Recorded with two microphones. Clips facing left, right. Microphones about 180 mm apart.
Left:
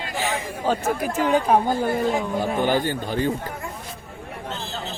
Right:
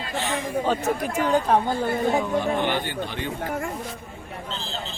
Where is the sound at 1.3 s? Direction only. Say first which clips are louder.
Left 2 dB; 10° left (ahead or behind).